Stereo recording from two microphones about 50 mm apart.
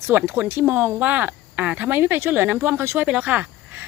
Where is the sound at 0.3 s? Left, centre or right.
Right.